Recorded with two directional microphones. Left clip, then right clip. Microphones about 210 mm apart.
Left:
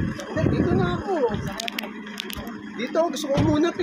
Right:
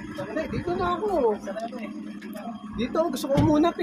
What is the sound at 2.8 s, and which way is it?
Speech, 55° right (ahead or behind).